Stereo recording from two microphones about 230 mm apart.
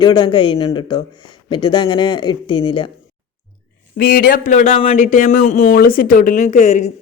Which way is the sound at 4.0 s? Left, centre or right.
Left.